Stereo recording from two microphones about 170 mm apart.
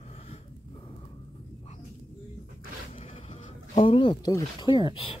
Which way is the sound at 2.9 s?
40° left (ahead or behind).